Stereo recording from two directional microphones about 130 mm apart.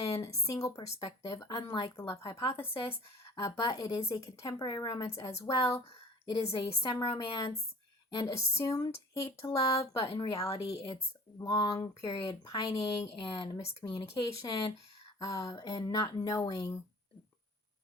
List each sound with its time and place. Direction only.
0.2 s speech: 25° left (ahead or behind)
6.4 s speech: 40° left (ahead or behind)
8.2 s speech: 20° left (ahead or behind); by 13.7 s 40° left (ahead or behind)
13.8 s speech: 20° left (ahead or behind)